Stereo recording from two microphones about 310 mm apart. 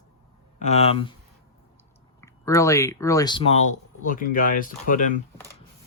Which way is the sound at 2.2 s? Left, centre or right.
Centre.